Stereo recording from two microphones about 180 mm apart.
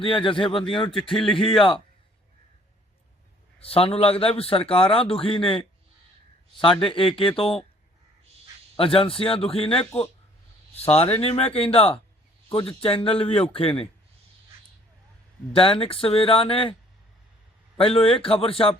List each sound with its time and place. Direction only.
0.0 s speech: 30° left (ahead or behind)
1.0 s speech: centre (ahead or behind)
3.6 s a man's voice: 30° left (ahead or behind)
8.7 s a man's voice: 30° left (ahead or behind)
15.5 s a man's voice: 30° left (ahead or behind)
17.7 s a man's voice: 30° left (ahead or behind)